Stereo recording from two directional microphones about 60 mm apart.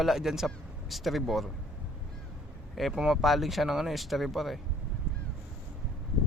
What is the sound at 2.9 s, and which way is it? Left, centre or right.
Speech, centre.